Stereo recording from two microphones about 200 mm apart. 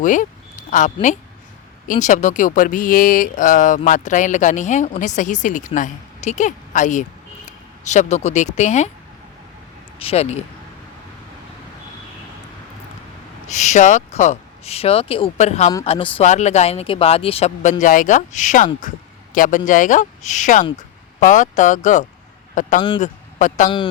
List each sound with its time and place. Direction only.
0.0 s a woman's voice: 40° left (ahead or behind)
10.0 s speech: 30° left (ahead or behind)
13.5 s a man's voice: 35° left (ahead or behind)
23.6 s a man's voice: 25° left (ahead or behind)